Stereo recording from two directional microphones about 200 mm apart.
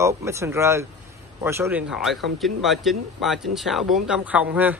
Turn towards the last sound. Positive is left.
turn(degrees=-5)  # may be behind; listen again after turning